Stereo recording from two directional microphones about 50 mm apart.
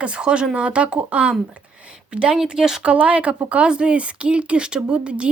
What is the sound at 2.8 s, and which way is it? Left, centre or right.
Speech, right.